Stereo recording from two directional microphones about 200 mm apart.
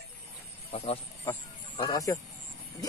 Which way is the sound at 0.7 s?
30° left (ahead or behind).